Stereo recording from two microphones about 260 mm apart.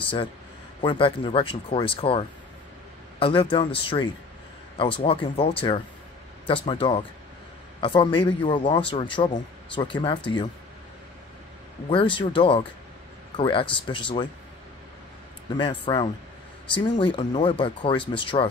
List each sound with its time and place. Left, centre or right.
0.0 s a man's voice: centre
11.9 s speech: centre
15.5 s speech: centre